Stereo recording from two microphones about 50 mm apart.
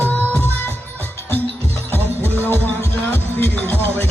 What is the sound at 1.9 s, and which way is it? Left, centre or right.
Music, left.